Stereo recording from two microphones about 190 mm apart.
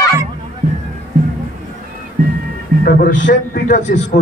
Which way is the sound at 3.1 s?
70° left (ahead or behind).